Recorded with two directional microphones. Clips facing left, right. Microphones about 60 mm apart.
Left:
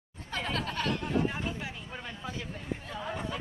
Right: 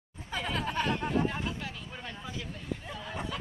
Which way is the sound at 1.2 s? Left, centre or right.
Centre.